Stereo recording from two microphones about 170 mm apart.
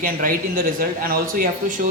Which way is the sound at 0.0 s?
55° right (ahead or behind).